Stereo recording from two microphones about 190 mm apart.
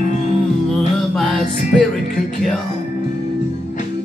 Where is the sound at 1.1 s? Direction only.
5° left (ahead or behind).